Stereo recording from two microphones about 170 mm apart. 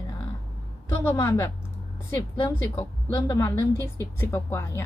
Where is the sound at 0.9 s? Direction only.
15° left (ahead or behind).